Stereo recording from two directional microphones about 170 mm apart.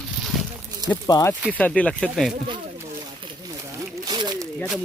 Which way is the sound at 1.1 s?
20° left (ahead or behind).